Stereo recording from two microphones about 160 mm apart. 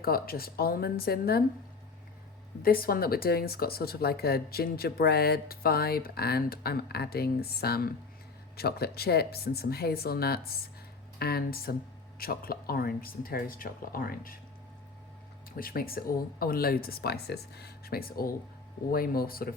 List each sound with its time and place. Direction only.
0.0 s speech: 70° left (ahead or behind)
2.6 s speech: 65° left (ahead or behind)
15.5 s speech: 65° left (ahead or behind)